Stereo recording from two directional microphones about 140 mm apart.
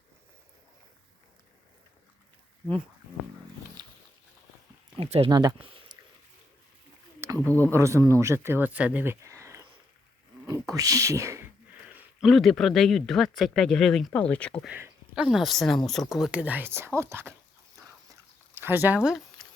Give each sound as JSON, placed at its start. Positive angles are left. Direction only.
{"t": 3.8, "sound": "pig", "side_deg": -30}
{"t": 4.9, "sound": "speech", "side_deg": -45}
{"t": 5.3, "sound": "speech", "side_deg": -25}
{"t": 7.3, "sound": "speech", "side_deg": 15}
{"t": 7.7, "sound": "speech", "side_deg": -20}
{"t": 12.2, "sound": "speech", "side_deg": 0}
{"t": 14.8, "sound": "speech", "side_deg": -5}
{"t": 18.6, "sound": "speech", "side_deg": -15}
{"t": 18.9, "sound": "a sound", "side_deg": -5}